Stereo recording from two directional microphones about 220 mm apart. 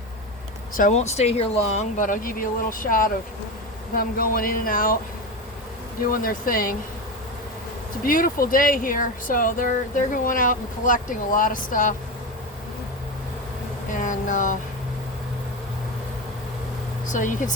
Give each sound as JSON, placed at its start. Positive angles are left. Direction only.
{"t": 0.8, "sound": "speech", "side_deg": 30}
{"t": 6.1, "sound": "speech", "side_deg": 40}
{"t": 8.0, "sound": "speech", "side_deg": 40}
{"t": 13.9, "sound": "a sound", "side_deg": 35}
{"t": 17.1, "sound": "speech", "side_deg": 35}